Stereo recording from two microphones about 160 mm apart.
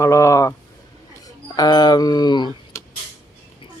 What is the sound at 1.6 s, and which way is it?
Speech, 25° left (ahead or behind).